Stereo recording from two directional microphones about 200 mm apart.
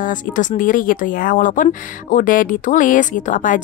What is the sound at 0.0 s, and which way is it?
Speech, 40° left (ahead or behind).